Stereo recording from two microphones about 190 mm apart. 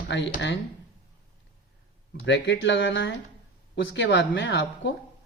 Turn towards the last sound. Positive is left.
turn(degrees=70)  # may be behind; listen again after turning